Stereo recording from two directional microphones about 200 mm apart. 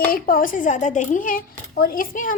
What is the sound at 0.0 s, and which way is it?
A child's voice, 45° left (ahead or behind).